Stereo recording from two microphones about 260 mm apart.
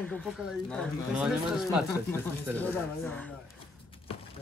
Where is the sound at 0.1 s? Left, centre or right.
Centre.